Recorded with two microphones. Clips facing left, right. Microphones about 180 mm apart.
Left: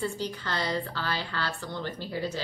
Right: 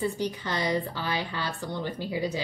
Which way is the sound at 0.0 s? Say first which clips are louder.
Right 3 dB; 15° right (ahead or behind).